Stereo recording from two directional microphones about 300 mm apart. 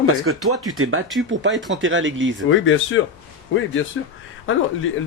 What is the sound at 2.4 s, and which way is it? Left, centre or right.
Speech, left.